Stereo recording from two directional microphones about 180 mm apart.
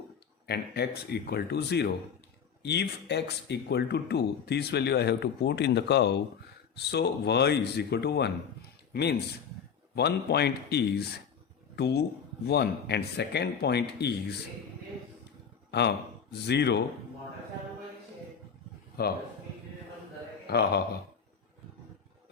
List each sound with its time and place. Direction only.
0.4 s speech: 65° left (ahead or behind)
16.3 s speech: 65° left (ahead or behind)
19.0 s speech: 60° left (ahead or behind)
20.5 s speech: 65° left (ahead or behind)